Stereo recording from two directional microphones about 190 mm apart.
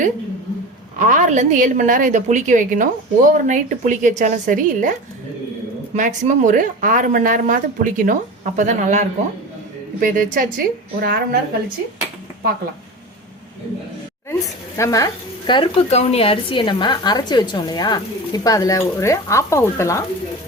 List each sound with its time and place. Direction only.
0.9 s a woman's voice: 45° right (ahead or behind)
14.3 s speech: 15° left (ahead or behind)